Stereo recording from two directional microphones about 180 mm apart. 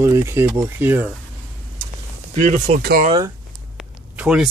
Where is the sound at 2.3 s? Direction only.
40° right (ahead or behind).